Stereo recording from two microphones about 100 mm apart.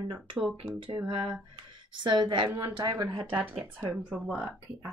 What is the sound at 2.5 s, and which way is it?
Speech, 30° right (ahead or behind).